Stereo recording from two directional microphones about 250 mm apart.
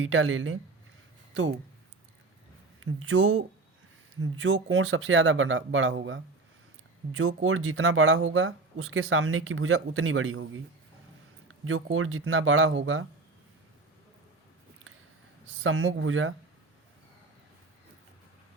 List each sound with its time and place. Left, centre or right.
0.0 s speech: right
2.8 s speech: right
15.6 s speech: right